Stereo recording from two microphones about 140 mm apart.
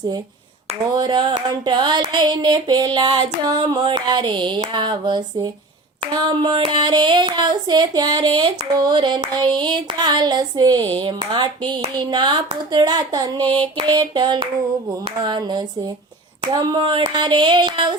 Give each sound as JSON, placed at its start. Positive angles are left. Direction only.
{"t": 0.9, "sound": "speech", "side_deg": -30}